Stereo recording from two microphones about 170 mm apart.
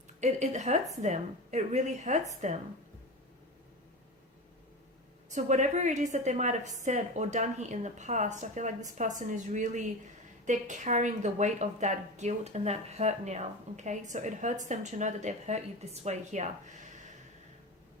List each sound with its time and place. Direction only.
0.2 s a woman's voice: 45° right (ahead or behind)
5.3 s a woman's voice: 45° right (ahead or behind)